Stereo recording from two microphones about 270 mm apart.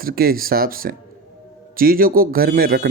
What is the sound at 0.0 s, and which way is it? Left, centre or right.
A man's voice, right.